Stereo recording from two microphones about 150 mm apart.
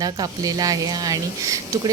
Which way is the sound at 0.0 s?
25° right (ahead or behind).